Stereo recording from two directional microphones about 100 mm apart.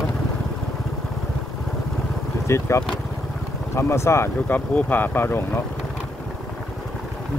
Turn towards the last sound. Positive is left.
turn(degrees=20)  # may be behind; listen again after turning